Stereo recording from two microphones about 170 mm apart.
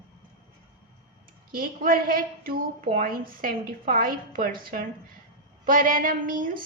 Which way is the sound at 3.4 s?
55° right (ahead or behind).